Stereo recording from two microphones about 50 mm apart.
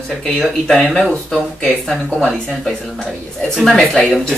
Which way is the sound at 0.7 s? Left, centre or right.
Centre.